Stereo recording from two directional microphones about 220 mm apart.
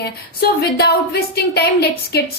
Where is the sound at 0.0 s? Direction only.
45° left (ahead or behind).